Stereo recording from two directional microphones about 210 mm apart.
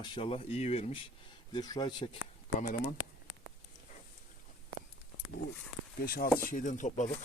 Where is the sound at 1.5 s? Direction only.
20° left (ahead or behind).